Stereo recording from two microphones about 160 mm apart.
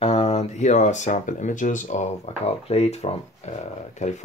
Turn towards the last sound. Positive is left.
turn(degrees=45)  # may be behind; listen again after turning